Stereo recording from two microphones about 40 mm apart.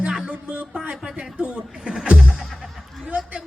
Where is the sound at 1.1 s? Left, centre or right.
Right.